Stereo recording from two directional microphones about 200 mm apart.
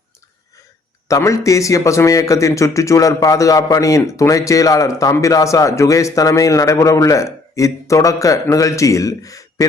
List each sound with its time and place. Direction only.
1.0 s speech: 15° left (ahead or behind)